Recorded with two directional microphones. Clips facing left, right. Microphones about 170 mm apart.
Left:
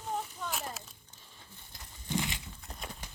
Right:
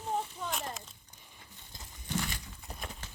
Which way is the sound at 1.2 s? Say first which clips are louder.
Even; 15° right (ahead or behind).